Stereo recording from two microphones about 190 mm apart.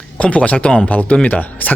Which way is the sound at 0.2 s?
5° left (ahead or behind).